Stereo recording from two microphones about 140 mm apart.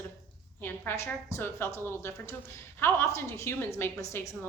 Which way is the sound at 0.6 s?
15° left (ahead or behind).